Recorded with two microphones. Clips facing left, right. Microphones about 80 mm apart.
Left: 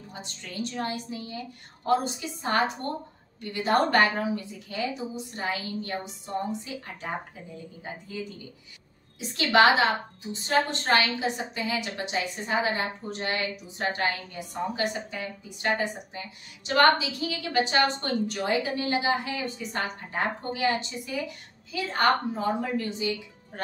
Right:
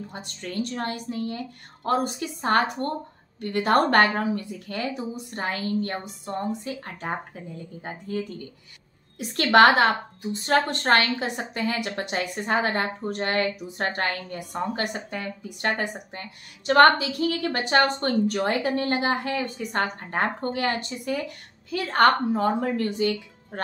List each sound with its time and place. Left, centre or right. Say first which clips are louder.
0.1 s a woman's voice: right 6 dB; right
9.4 s a woman's voice: right 4 dB; right